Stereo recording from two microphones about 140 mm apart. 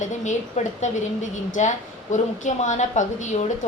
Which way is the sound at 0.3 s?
60° left (ahead or behind).